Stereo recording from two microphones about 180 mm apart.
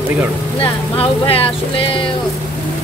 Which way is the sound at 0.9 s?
30° left (ahead or behind).